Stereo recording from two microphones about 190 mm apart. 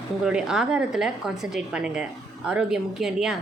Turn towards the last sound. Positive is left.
turn(degrees=0)  # may be behind; listen again after turning